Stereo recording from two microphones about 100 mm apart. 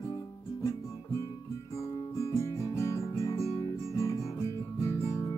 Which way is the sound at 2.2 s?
30° left (ahead or behind).